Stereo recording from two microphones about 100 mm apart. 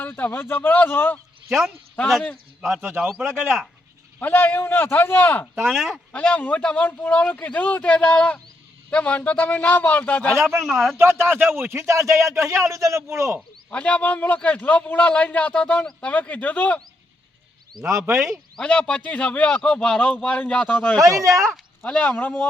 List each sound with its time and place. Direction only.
0.0 s a man's voice: 20° left (ahead or behind)
1.5 s speech: 5° right (ahead or behind)
4.2 s a man's voice: 20° left (ahead or behind)
5.6 s speech: centre (ahead or behind)
6.1 s a man's voice: 15° left (ahead or behind)
10.4 s speech: centre (ahead or behind)
10.9 s a man's voice: 25° right (ahead or behind)
13.7 s a man's voice: 15° left (ahead or behind)
17.8 s speech: 30° right (ahead or behind)
18.1 s speech: centre (ahead or behind)
18.6 s a man's voice: 10° left (ahead or behind)
21.0 s a man's voice: 35° right (ahead or behind)
21.8 s a man's voice: 10° left (ahead or behind)